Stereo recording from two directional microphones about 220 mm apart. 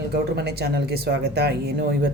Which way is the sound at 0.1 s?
45° right (ahead or behind).